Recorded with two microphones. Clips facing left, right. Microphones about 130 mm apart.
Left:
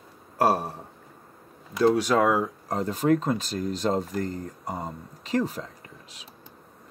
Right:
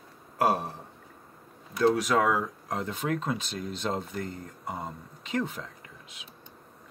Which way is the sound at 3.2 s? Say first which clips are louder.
Left 5 dB; 40° left (ahead or behind).